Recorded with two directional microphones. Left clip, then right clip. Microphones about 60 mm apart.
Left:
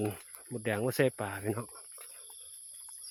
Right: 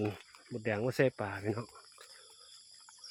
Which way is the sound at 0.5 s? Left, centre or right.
Left.